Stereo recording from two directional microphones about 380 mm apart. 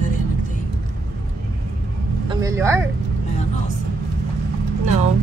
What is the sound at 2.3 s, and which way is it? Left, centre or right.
Speech, centre.